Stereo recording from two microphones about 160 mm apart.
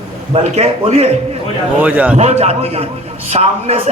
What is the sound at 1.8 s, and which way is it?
Speech, 10° right (ahead or behind).